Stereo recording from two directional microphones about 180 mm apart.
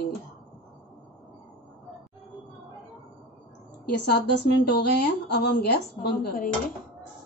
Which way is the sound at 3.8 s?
65° left (ahead or behind).